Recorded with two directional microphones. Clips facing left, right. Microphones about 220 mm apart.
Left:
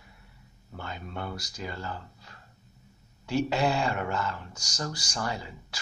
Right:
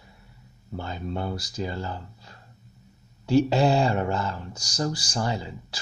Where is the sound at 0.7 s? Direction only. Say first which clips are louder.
Right 6 dB; 30° right (ahead or behind).